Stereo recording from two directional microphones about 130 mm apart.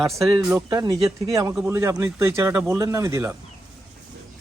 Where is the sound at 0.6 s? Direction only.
25° right (ahead or behind).